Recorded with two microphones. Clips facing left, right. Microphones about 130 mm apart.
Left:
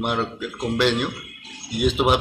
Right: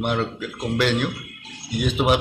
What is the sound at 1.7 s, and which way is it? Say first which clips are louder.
Speech: left 2 dB; 20° left (ahead or behind).